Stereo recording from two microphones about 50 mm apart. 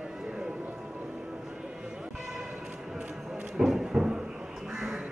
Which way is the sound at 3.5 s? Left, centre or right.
Centre.